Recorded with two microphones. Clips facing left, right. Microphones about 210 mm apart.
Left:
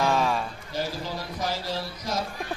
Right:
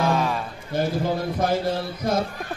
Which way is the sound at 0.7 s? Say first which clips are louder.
Right 8 dB; 55° right (ahead or behind).